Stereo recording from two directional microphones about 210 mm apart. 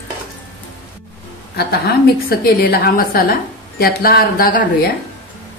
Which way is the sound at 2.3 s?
45° left (ahead or behind).